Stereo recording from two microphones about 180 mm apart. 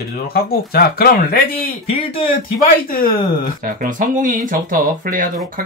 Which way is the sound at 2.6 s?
50° left (ahead or behind).